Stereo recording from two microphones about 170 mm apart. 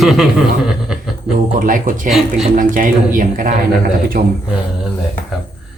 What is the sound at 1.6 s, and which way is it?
Speech, 50° right (ahead or behind).